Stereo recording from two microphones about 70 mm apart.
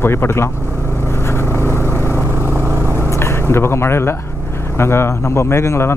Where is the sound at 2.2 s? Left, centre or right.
Right.